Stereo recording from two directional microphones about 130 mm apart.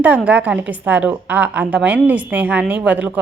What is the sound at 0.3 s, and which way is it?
A woman's voice, 10° right (ahead or behind).